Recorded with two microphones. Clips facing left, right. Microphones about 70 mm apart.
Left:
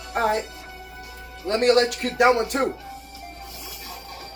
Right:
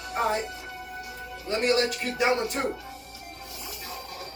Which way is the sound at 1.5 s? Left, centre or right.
Left.